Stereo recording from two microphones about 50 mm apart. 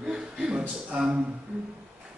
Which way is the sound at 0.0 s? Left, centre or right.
Centre.